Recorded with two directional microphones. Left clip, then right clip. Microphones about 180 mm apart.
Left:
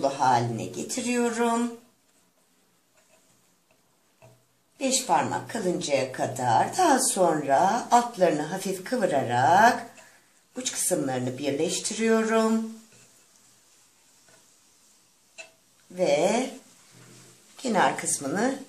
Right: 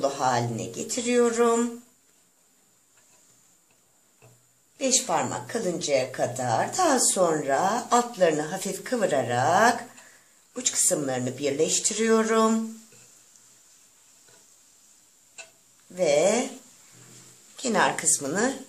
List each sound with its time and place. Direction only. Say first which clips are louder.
0.0 s a sound: left 2 dB; 40° right (ahead or behind)
0.8 s speech: right 5 dB; 35° right (ahead or behind)
4.7 s speech: left 1 dB; 35° right (ahead or behind)
15.9 s speech: right 1 dB; 35° right (ahead or behind)
17.6 s speech: even; 35° right (ahead or behind)